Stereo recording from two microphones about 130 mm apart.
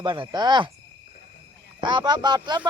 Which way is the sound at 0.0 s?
35° right (ahead or behind).